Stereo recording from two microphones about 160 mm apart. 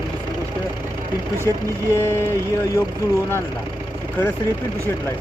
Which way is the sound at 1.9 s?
15° left (ahead or behind).